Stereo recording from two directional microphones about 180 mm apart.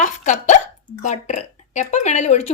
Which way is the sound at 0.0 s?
45° left (ahead or behind).